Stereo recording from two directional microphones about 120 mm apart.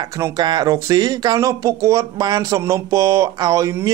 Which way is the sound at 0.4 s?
35° right (ahead or behind).